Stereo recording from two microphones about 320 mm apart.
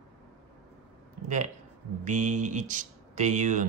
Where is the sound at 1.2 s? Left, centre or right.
Right.